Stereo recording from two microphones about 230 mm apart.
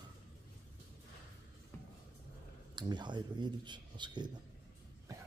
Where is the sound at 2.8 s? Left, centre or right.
Centre.